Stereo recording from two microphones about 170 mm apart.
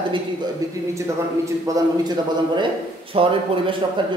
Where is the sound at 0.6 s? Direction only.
20° right (ahead or behind).